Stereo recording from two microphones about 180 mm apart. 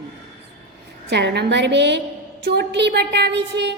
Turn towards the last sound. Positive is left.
turn(degrees=-70)  # may be behind; listen again after turning